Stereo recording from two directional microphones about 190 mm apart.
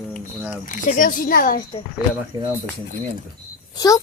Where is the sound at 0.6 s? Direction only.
45° left (ahead or behind).